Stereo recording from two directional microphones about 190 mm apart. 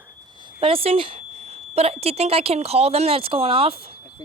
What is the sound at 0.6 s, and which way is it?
Speech, 30° right (ahead or behind).